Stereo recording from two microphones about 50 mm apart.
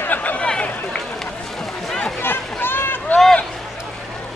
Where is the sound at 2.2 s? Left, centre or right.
Left.